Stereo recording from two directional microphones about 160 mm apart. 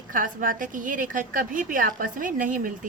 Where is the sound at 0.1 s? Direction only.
55° right (ahead or behind).